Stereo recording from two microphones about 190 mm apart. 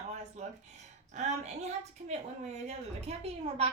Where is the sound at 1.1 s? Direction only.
35° right (ahead or behind).